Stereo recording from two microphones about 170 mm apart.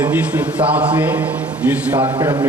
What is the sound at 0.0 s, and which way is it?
A man's voice, 10° right (ahead or behind).